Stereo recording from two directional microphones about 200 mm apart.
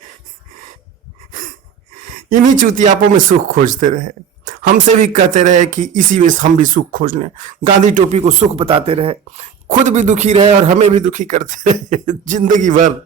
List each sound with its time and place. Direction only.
2.1 s speech: 40° right (ahead or behind)